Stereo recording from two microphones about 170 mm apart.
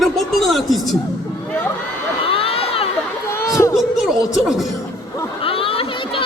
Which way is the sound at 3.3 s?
15° left (ahead or behind).